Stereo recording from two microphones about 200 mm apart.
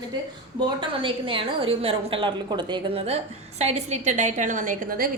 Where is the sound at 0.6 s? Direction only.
25° right (ahead or behind).